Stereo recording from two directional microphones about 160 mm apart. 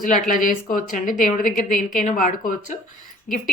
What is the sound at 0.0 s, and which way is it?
A woman's voice, 55° left (ahead or behind).